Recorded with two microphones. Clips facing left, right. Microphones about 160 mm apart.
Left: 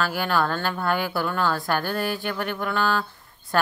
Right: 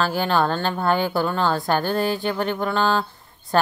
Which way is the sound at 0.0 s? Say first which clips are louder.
Right 3 dB; 25° right (ahead or behind).